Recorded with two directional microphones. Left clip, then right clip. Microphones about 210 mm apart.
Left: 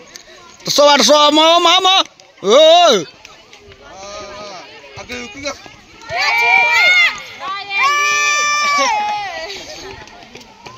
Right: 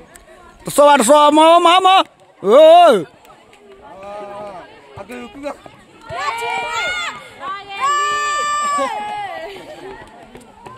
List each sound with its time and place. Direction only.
0.7 s a man's voice: 10° right (ahead or behind)
4.1 s a sound: 25° right (ahead or behind)
6.0 s run: 60° right (ahead or behind)